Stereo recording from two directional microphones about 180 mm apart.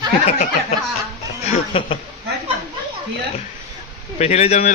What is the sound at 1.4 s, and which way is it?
Speech, 35° left (ahead or behind).